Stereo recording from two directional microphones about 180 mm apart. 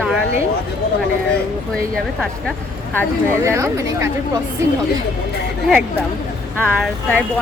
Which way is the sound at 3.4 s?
15° right (ahead or behind).